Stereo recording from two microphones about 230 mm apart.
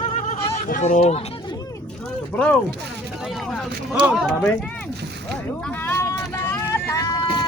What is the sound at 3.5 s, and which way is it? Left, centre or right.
Speech, centre.